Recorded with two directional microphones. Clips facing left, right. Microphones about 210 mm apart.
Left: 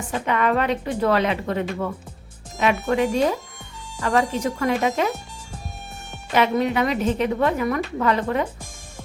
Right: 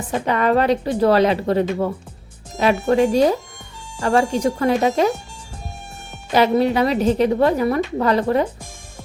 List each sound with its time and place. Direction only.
0.1 s a woman's voice: 35° right (ahead or behind)
6.3 s a woman's voice: 35° right (ahead or behind)